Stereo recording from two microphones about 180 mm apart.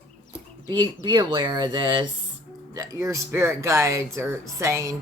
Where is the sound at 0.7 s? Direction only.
25° right (ahead or behind).